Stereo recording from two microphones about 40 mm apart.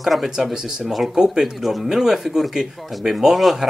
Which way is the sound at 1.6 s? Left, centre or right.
Centre.